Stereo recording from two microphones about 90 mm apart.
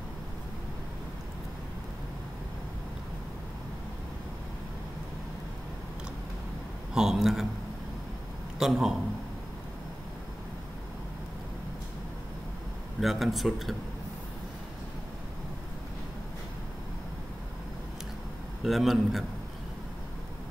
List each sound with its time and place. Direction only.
6.9 s a man's voice: 5° right (ahead or behind)
8.5 s speech: 5° right (ahead or behind)
13.0 s speech: centre (ahead or behind)
18.6 s speech: centre (ahead or behind)